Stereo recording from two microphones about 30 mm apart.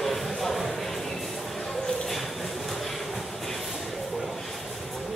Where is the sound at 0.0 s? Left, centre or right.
Centre.